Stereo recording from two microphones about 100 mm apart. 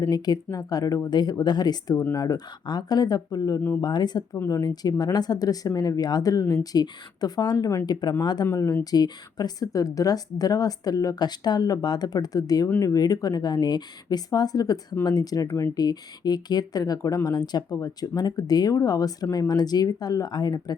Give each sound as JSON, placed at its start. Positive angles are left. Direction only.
{"t": 0.1, "sound": "a woman's voice", "side_deg": 40}
{"t": 8.5, "sound": "a woman's voice", "side_deg": 35}
{"t": 15.4, "sound": "speech", "side_deg": 30}
{"t": 15.7, "sound": "a woman's voice", "side_deg": 40}